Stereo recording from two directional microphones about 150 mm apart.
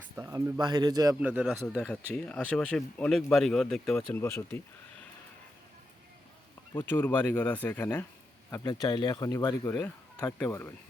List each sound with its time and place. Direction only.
0.2 s a man's voice: 20° right (ahead or behind)
1.2 s a man's voice: 10° right (ahead or behind)
1.6 s speech: 5° left (ahead or behind)
4.2 s speech: 15° left (ahead or behind)
6.7 s speech: 15° left (ahead or behind)
8.6 s speech: 25° left (ahead or behind)